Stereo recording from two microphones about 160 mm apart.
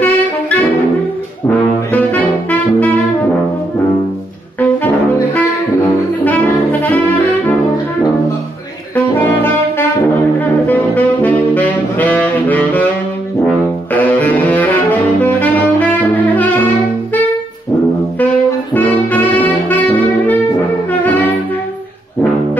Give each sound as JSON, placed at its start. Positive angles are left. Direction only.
{"t": 0.0, "sound": "saxophone", "side_deg": 10}
{"t": 1.9, "sound": "saxophone", "side_deg": 10}
{"t": 4.6, "sound": "saxophone", "side_deg": 10}
{"t": 6.2, "sound": "brass instrument", "side_deg": 10}
{"t": 8.9, "sound": "saxophone", "side_deg": 10}
{"t": 13.9, "sound": "saxophone", "side_deg": 10}
{"t": 18.2, "sound": "saxophone", "side_deg": 10}